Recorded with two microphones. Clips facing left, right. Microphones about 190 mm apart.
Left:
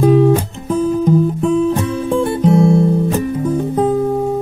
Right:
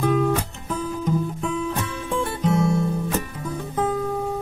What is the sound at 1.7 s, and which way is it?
Music, 30° left (ahead or behind).